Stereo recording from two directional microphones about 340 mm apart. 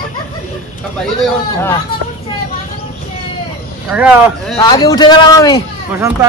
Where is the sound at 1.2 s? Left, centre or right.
Centre.